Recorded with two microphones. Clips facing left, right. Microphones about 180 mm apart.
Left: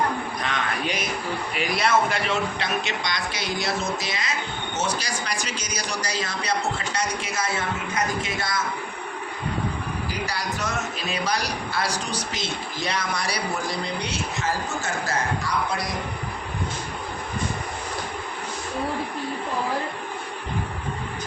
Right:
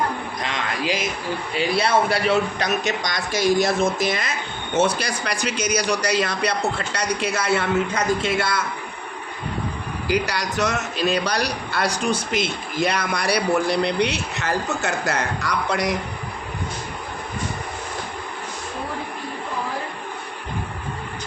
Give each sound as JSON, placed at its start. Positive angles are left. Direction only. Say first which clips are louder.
{"t": 0.5, "sound": "a sound", "louder": "right 4 dB", "side_deg": -90}
{"t": 1.5, "sound": "a man's voice", "louder": "right 3 dB", "side_deg": -30}
{"t": 10.1, "sound": "a man's voice", "louder": "right 10 dB", "side_deg": -75}